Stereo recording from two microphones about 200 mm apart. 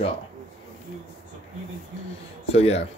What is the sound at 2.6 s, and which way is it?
Speech, 30° left (ahead or behind).